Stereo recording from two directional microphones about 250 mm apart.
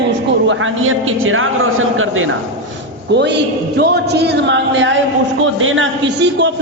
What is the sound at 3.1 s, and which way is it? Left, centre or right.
A man's voice, right.